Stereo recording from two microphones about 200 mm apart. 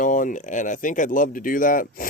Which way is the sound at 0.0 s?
40° left (ahead or behind).